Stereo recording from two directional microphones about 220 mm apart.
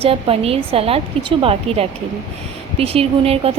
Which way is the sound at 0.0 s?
25° right (ahead or behind).